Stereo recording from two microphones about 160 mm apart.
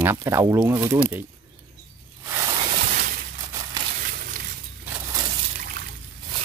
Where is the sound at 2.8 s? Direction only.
60° right (ahead or behind).